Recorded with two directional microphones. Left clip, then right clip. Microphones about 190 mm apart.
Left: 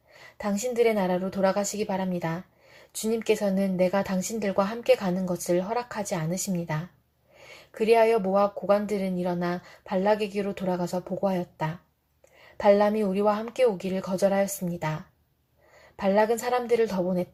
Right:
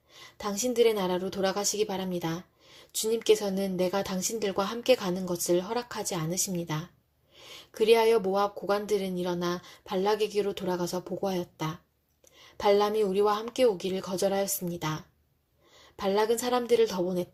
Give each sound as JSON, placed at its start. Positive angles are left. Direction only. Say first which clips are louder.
{"t": 0.7, "sound": "a woman's voice", "louder": "left 1 dB", "side_deg": -40}
{"t": 6.1, "sound": "a woman's voice", "louder": "left 2 dB", "side_deg": -30}
{"t": 6.5, "sound": "a woman's voice", "louder": "left 2 dB", "side_deg": -45}